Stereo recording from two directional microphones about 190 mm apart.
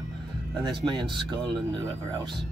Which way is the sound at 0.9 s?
25° right (ahead or behind).